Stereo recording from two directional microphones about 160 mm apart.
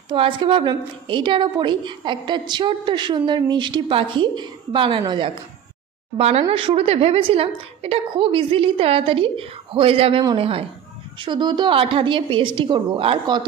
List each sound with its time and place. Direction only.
0.1 s a woman's voice: 35° right (ahead or behind)